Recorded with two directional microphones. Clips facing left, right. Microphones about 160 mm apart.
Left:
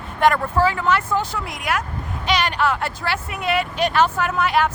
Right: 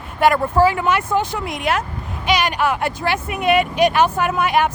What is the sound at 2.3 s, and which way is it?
Speech, 10° right (ahead or behind).